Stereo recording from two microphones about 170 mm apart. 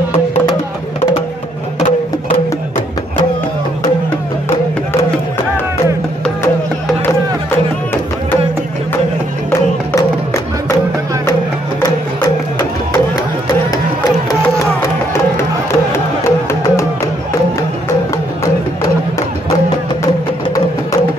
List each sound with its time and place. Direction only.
15.9 s music: 15° left (ahead or behind)